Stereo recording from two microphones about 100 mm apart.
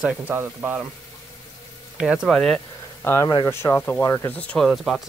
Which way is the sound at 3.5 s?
25° left (ahead or behind).